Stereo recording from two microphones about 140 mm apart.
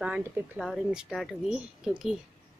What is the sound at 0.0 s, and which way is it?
Speech, 5° right (ahead or behind).